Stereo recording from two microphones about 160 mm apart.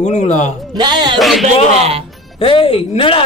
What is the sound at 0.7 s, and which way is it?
Speech, 25° right (ahead or behind).